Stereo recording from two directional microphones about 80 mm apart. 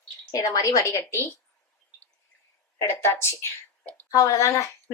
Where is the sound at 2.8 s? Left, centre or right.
Left.